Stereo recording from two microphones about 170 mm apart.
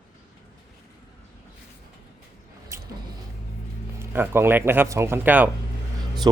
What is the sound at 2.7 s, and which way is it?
Vehicle, 15° right (ahead or behind).